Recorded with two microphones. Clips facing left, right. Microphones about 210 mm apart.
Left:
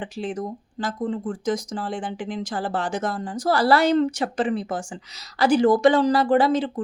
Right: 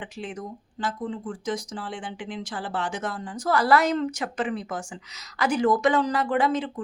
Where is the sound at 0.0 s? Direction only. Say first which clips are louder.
Left 6 dB; 35° left (ahead or behind).